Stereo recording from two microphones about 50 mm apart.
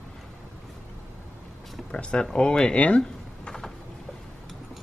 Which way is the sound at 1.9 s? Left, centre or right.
Centre.